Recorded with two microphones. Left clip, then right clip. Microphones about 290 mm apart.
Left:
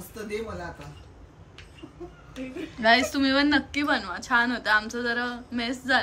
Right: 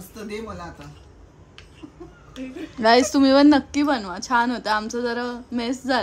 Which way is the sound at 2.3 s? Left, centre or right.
Centre.